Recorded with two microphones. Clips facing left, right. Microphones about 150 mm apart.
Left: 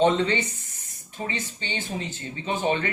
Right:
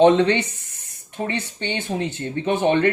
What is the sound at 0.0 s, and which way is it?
Speech, 65° right (ahead or behind).